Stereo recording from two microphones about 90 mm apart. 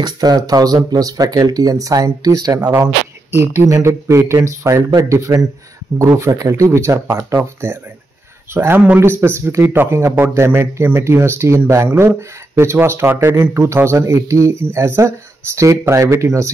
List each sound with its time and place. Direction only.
0.0 s speech: 45° right (ahead or behind)
3.3 s speech: 30° right (ahead or behind)